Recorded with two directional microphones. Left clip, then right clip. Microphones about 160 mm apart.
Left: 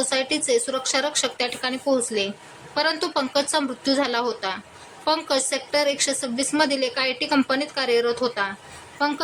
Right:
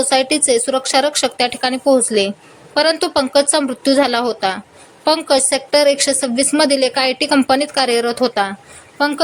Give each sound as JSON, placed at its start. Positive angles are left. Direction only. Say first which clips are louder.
{"t": 0.1, "sound": "a woman's voice", "louder": "right 8 dB", "side_deg": -30}